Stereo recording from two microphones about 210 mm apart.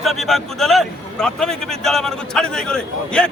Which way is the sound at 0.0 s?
Centre (ahead or behind).